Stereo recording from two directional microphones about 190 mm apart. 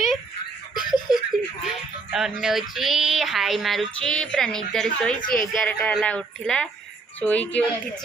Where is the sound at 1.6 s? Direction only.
Centre (ahead or behind).